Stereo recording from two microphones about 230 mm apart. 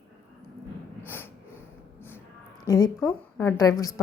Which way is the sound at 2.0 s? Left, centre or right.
Centre.